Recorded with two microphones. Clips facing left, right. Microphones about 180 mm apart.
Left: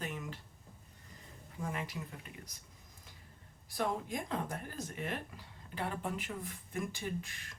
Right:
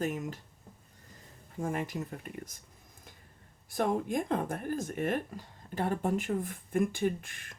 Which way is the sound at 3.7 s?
50° right (ahead or behind).